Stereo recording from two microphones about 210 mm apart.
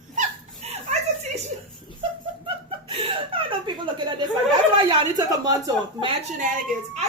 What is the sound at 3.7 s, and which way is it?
Speech, 25° right (ahead or behind).